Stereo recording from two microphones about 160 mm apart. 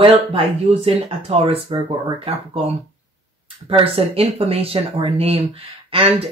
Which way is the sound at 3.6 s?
35° right (ahead or behind).